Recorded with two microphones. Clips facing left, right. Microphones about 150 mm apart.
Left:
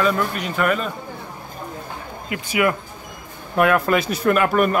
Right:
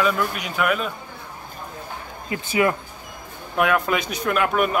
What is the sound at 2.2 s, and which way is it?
Speech, 30° right (ahead or behind).